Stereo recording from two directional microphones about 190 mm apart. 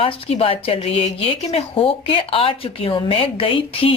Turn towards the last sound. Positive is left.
turn(degrees=30)  # may be behind; listen again after turning